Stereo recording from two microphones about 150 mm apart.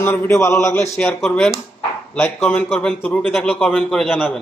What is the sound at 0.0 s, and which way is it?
A man's voice, 15° left (ahead or behind).